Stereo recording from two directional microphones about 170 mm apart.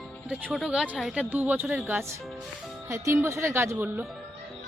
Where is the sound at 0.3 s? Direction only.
5° right (ahead or behind).